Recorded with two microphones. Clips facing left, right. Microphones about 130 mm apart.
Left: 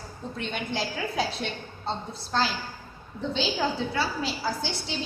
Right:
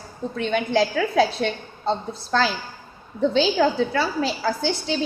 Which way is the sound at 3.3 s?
60° right (ahead or behind).